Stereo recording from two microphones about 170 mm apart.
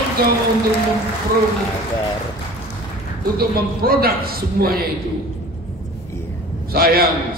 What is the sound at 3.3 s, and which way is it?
A man's voice, 60° right (ahead or behind).